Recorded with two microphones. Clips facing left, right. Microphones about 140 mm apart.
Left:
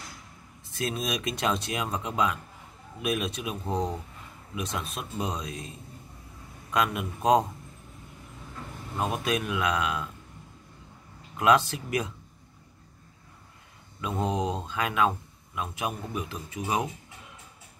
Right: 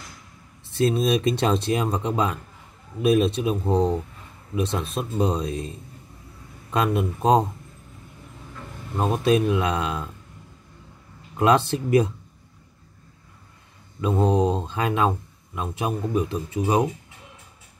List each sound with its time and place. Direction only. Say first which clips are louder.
0.7 s speech: right 10 dB; 30° right (ahead or behind)
6.7 s speech: right 5 dB; 30° right (ahead or behind)
8.9 s speech: right 8 dB; 30° right (ahead or behind)
11.3 s speech: right 3 dB; 30° right (ahead or behind)
14.0 s speech: right 8 dB; 30° right (ahead or behind)